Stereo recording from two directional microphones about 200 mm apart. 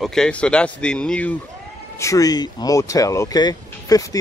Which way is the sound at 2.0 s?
15° left (ahead or behind).